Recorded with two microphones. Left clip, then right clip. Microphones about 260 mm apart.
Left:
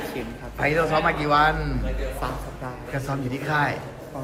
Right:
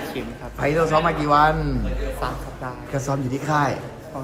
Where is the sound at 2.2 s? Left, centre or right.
Centre.